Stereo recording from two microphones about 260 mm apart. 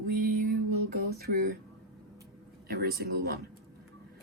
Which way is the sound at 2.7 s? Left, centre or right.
Right.